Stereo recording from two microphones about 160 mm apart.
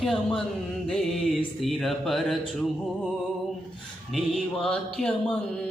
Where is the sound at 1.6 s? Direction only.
Centre (ahead or behind).